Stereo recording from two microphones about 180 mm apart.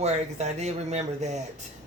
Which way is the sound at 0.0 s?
40° right (ahead or behind).